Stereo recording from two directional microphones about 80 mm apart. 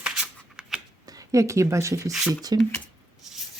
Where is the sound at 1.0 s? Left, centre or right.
Right.